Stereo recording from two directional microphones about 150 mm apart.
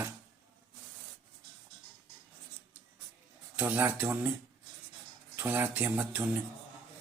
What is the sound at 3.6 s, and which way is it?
Speech, 10° right (ahead or behind).